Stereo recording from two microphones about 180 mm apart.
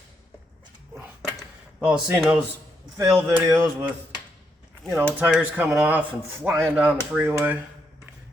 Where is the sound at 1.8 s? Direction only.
10° right (ahead or behind).